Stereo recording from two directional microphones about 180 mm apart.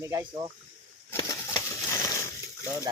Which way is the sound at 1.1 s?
15° left (ahead or behind).